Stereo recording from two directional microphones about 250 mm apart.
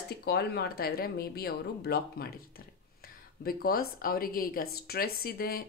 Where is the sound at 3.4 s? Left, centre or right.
Left.